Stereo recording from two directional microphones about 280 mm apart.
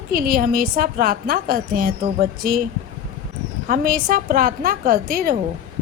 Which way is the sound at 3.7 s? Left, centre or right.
Right.